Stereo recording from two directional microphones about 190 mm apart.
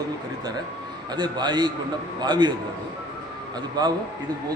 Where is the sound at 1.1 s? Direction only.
25° right (ahead or behind).